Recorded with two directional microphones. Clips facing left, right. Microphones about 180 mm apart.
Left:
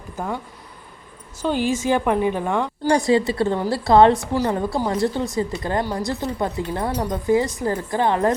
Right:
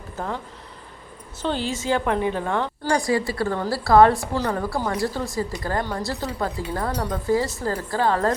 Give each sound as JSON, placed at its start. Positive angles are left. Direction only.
{"t": 0.2, "sound": "a woman's voice", "side_deg": 10}
{"t": 1.4, "sound": "a woman's voice", "side_deg": 10}